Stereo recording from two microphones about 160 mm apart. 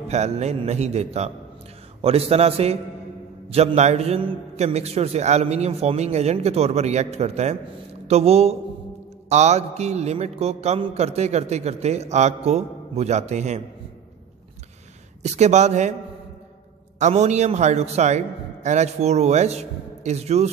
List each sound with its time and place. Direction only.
0.1 s a man's voice: 45° right (ahead or behind)
15.2 s a man's voice: 45° right (ahead or behind)
17.0 s a man's voice: 45° right (ahead or behind)